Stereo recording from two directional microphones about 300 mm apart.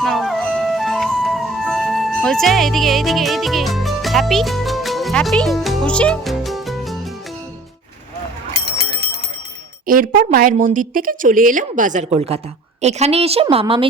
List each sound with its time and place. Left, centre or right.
0.0 s music: centre
9.8 s a woman's voice: right